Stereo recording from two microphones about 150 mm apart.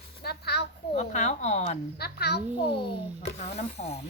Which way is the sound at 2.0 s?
90° left.